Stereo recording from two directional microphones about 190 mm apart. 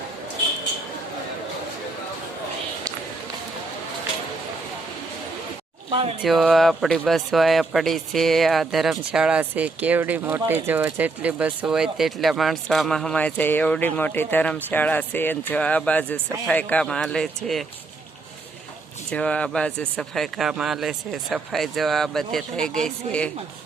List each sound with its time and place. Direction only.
6.2 s speech: centre (ahead or behind)
19.1 s speech: 5° left (ahead or behind)